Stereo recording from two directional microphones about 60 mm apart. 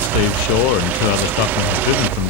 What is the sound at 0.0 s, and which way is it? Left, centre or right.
Speech, right.